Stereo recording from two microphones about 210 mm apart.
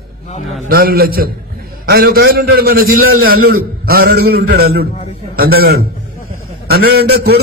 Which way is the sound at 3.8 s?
50° right (ahead or behind).